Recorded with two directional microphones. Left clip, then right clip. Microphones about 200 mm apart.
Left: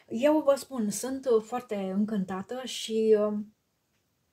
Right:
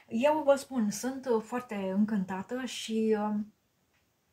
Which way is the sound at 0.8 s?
50° left (ahead or behind).